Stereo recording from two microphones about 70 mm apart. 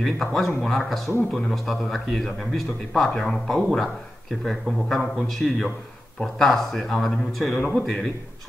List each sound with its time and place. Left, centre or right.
0.0 s speech: centre